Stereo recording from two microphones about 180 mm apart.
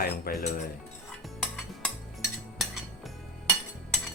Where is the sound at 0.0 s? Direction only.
55° left (ahead or behind).